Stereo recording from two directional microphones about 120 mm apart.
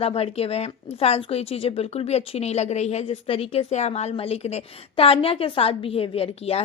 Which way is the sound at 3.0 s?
50° left (ahead or behind).